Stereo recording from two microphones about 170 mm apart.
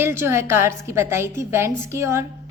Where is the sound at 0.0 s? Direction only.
15° right (ahead or behind).